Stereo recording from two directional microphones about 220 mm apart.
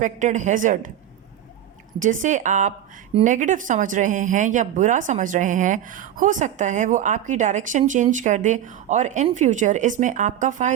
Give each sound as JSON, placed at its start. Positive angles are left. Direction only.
{"t": 0.0, "sound": "speech", "side_deg": -35}
{"t": 2.0, "sound": "speech", "side_deg": -35}